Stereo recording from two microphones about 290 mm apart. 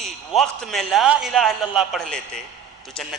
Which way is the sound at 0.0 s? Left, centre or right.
Centre.